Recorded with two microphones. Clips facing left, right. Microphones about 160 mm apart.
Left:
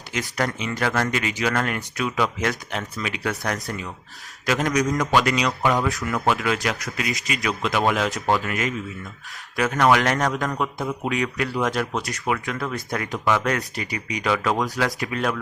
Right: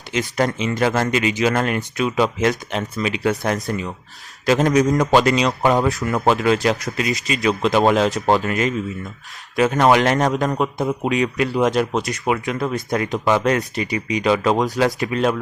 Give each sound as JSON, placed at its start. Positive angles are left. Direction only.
{"t": 0.1, "sound": "a man's voice", "side_deg": -25}